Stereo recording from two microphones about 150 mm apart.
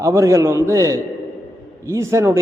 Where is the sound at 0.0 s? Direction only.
20° right (ahead or behind).